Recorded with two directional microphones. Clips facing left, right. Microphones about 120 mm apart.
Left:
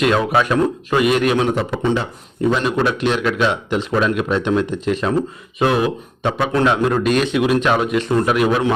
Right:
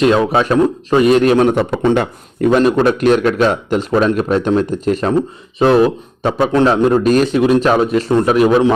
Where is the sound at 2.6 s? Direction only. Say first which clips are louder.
Right 6 dB; 45° right (ahead or behind).